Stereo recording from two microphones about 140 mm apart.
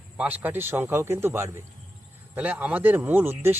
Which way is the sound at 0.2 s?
10° right (ahead or behind).